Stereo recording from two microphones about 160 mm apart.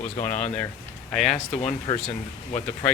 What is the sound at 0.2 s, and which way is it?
Speech, 50° left (ahead or behind).